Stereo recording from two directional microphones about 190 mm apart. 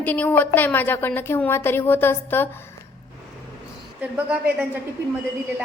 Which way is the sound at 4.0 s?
5° right (ahead or behind).